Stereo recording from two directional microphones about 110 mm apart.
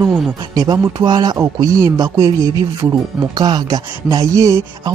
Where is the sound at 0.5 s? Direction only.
35° right (ahead or behind).